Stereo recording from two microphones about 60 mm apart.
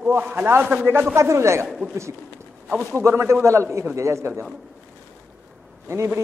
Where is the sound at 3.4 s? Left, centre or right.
Right.